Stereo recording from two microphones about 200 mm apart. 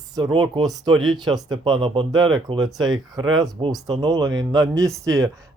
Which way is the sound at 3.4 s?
20° right (ahead or behind).